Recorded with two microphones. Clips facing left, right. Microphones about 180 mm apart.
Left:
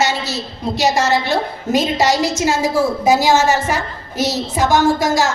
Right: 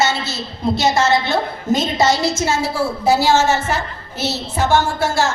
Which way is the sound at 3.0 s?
15° left (ahead or behind).